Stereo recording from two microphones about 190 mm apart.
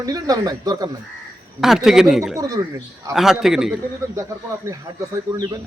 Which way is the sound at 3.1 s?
Centre (ahead or behind).